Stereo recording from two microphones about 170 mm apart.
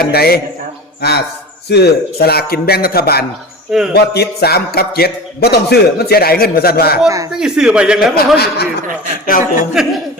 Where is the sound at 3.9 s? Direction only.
70° left (ahead or behind).